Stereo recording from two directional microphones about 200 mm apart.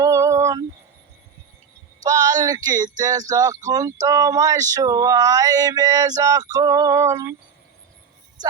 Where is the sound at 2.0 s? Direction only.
15° right (ahead or behind).